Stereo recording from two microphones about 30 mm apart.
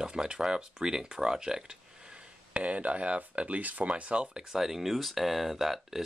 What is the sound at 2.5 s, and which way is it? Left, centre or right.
Speech, right.